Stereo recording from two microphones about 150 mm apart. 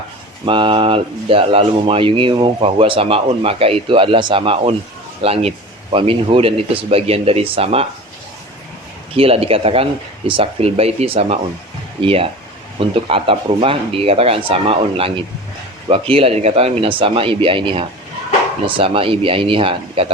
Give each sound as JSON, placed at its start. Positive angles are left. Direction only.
{"t": 0.4, "sound": "speech", "side_deg": -35}
{"t": 9.1, "sound": "speech", "side_deg": -40}